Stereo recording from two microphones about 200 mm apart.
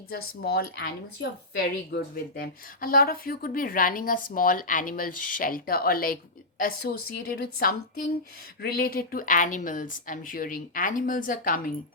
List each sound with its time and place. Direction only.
0.1 s speech: 50° left (ahead or behind)